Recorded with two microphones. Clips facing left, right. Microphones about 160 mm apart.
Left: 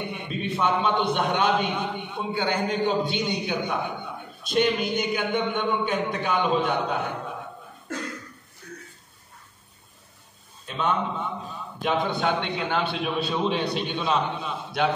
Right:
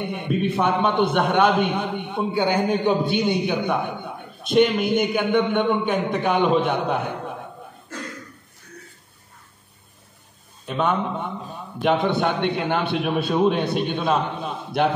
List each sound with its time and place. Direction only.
0.1 s a man's voice: 55° right (ahead or behind)
10.7 s a man's voice: 55° right (ahead or behind)